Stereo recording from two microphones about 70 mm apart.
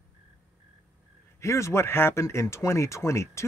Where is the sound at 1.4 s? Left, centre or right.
Left.